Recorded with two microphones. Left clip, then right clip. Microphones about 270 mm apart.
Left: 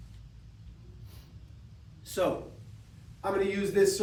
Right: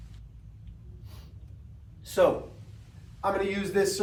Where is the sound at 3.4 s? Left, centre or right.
Centre.